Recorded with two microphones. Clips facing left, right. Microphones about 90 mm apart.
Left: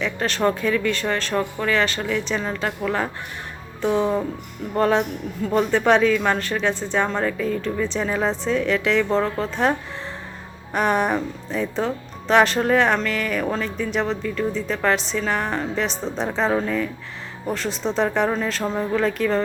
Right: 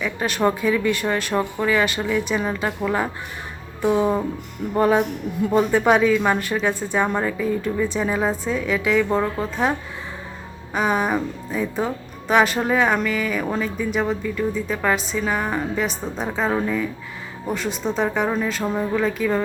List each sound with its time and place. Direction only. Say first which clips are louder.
0.0 s speech: even; 10° right (ahead or behind)